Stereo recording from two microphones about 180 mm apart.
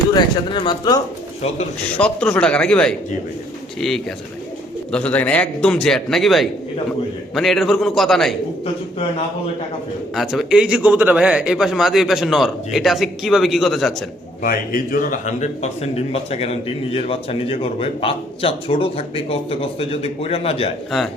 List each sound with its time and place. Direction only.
0.1 s speech: 25° left (ahead or behind)
2.0 s a man's voice: 5° left (ahead or behind)
10.2 s a man's voice: centre (ahead or behind)
14.4 s a man's voice: 50° left (ahead or behind); by 20.7 s 35° left (ahead or behind)